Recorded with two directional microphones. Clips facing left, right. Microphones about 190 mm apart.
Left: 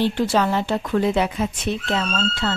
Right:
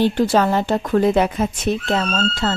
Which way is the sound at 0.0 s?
45° right (ahead or behind).